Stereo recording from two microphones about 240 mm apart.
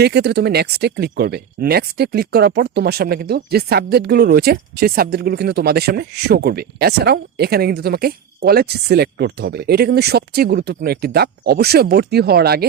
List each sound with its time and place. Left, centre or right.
0.0 s speech: right